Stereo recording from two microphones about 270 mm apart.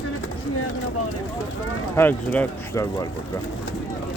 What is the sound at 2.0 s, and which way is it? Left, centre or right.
Speech, centre.